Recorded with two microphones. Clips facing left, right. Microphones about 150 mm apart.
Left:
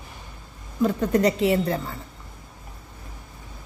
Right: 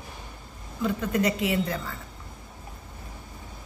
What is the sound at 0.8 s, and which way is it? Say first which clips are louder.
A woman's voice: left 5 dB; 40° left (ahead or behind).